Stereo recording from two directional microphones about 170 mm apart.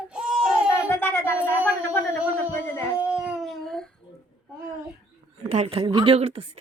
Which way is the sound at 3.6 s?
5° left (ahead or behind).